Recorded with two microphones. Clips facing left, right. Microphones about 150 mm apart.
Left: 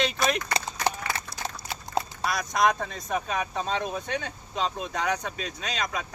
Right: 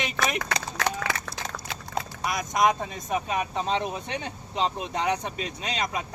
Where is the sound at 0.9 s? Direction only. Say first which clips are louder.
Right 2 dB; 90° right.